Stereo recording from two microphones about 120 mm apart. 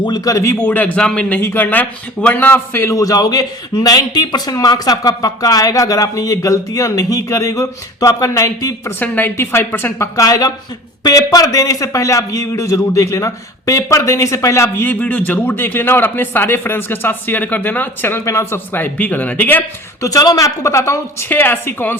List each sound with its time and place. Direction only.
0.0 s a man's voice: 30° left (ahead or behind)
9.0 s a man's voice: 15° left (ahead or behind)
20.1 s a man's voice: 30° left (ahead or behind)